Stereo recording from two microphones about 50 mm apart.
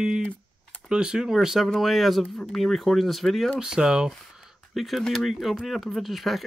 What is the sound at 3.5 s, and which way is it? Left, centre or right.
Speech, centre.